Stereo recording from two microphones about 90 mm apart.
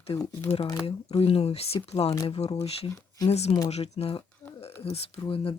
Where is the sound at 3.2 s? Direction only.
45° left (ahead or behind).